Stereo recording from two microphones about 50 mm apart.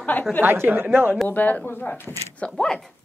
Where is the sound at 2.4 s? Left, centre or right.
Left.